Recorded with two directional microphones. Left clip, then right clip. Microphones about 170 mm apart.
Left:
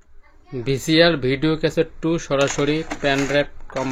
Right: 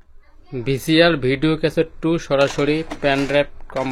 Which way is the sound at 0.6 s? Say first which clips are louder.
Right 1 dB; centre (ahead or behind).